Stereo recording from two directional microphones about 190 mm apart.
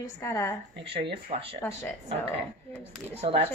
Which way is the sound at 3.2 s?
30° right (ahead or behind).